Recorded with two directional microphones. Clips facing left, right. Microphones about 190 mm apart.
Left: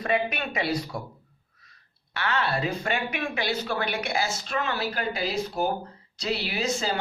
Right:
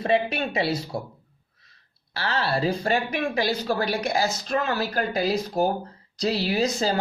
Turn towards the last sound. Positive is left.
turn(degrees=-40)  # may be behind; listen again after turning